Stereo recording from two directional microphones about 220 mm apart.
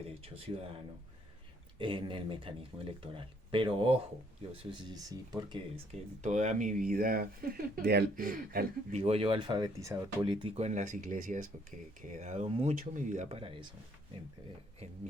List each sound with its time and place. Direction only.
1.8 s speech: 20° right (ahead or behind)
6.2 s speech: 35° right (ahead or behind)